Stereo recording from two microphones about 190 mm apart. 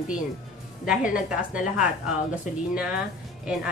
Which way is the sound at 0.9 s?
5° right (ahead or behind).